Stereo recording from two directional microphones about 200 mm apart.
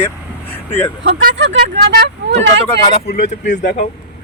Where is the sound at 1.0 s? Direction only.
50° right (ahead or behind).